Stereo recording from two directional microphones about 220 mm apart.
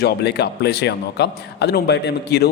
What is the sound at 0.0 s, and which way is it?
A man's voice, 50° left (ahead or behind).